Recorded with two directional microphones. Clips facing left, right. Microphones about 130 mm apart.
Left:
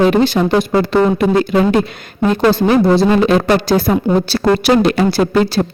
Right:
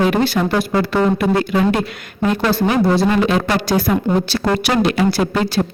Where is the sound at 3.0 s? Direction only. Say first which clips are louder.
Left 4 dB; 30° left (ahead or behind).